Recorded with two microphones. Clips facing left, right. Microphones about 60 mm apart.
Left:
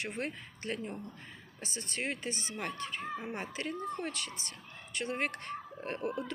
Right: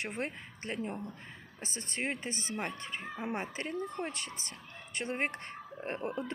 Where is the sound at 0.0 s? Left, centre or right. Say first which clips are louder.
Even; right.